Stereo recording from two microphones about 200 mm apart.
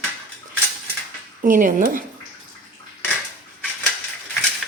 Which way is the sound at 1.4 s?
40° right (ahead or behind).